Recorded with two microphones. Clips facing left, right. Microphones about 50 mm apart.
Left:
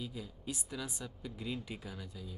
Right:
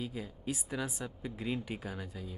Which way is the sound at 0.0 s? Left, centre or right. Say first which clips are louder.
Right 4 dB; right.